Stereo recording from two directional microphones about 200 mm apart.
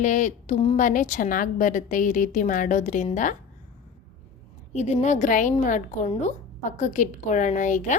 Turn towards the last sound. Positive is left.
turn(degrees=40)  # may be behind; listen again after turning